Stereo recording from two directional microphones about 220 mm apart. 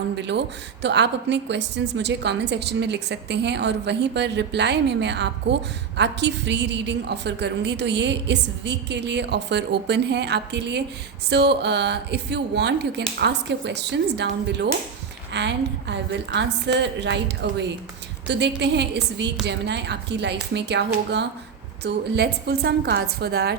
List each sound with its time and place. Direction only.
0.2 s a woman's voice: 50° right (ahead or behind)